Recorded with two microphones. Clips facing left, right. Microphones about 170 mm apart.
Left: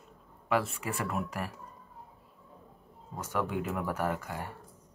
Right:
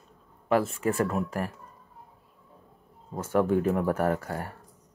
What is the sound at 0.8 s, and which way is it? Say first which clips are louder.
Speech: right 8 dB; 45° right (ahead or behind).